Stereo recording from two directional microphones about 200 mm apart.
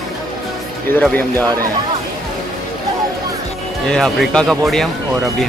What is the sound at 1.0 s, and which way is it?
Speech, 5° left (ahead or behind).